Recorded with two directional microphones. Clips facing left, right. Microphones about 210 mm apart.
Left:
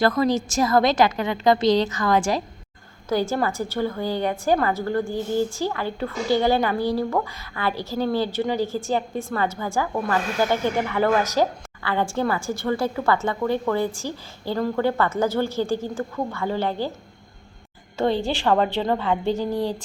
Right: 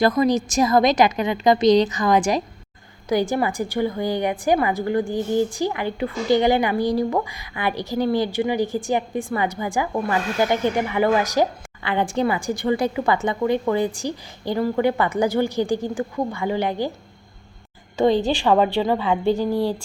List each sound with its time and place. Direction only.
0.0 s a woman's voice: 15° right (ahead or behind)
9.9 s speech: 5° right (ahead or behind)
10.4 s a woman's voice: 15° right (ahead or behind)
17.9 s a woman's voice: 15° right (ahead or behind)